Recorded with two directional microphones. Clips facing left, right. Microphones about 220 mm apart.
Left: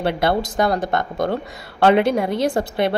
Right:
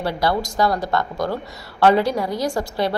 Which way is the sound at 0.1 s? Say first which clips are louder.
Left 2 dB; 25° left (ahead or behind).